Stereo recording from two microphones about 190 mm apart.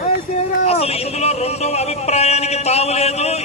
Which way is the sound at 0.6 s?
30° left (ahead or behind).